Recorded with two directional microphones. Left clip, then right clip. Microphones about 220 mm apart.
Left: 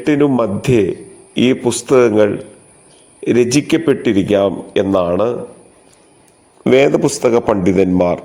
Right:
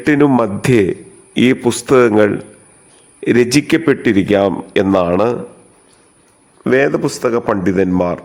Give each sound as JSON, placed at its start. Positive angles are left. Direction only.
{"t": 0.0, "sound": "a man's voice", "side_deg": -20}
{"t": 6.7, "sound": "a man's voice", "side_deg": -10}